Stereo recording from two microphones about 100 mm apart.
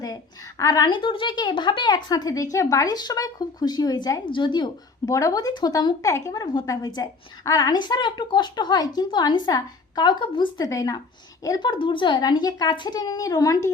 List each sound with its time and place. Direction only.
0.6 s speech: 35° left (ahead or behind)
0.9 s speech: 55° left (ahead or behind)
5.0 s speech: 35° left (ahead or behind); by 10.5 s 55° left (ahead or behind)
10.6 s speech: 35° left (ahead or behind)
11.6 s speech: 55° left (ahead or behind); by 13.7 s 35° left (ahead or behind)